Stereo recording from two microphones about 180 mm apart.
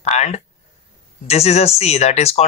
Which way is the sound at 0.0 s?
40° left (ahead or behind).